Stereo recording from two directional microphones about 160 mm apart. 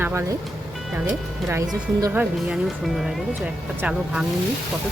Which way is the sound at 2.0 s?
10° right (ahead or behind).